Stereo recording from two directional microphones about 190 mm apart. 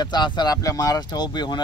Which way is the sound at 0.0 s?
25° left (ahead or behind).